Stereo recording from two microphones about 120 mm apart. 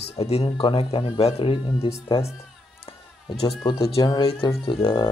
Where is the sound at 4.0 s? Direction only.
35° left (ahead or behind).